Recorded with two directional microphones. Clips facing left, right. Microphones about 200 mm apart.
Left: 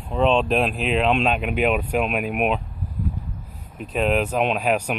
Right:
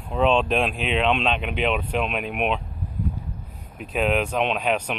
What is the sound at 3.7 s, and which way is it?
Speech, centre (ahead or behind).